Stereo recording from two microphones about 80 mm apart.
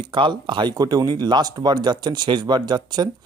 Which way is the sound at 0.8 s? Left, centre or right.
Right.